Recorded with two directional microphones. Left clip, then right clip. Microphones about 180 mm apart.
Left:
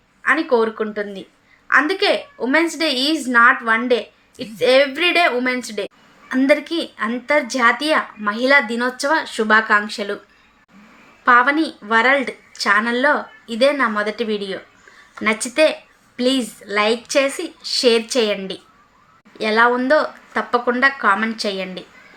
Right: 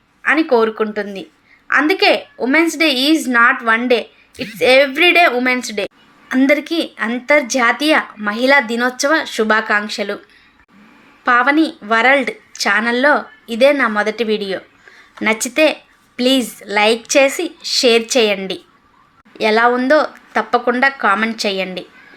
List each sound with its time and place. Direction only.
0.2 s a woman's voice: 15° right (ahead or behind)
11.3 s a woman's voice: 15° right (ahead or behind)